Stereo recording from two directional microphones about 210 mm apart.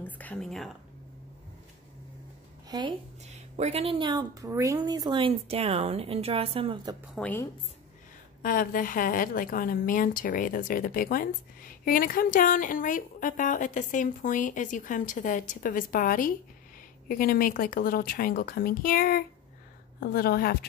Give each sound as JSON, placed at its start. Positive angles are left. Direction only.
{"t": 0.0, "sound": "whispering", "side_deg": 10}
{"t": 2.7, "sound": "a woman's voice", "side_deg": -20}
{"t": 3.3, "sound": "a woman's voice", "side_deg": -30}
{"t": 7.2, "sound": "a woman's voice", "side_deg": 10}
{"t": 8.4, "sound": "a woman's voice", "side_deg": 40}